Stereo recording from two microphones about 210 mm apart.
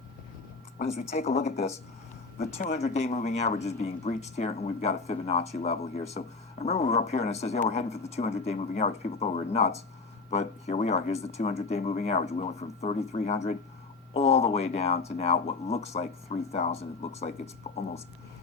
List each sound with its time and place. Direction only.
0.8 s speech: 30° left (ahead or behind)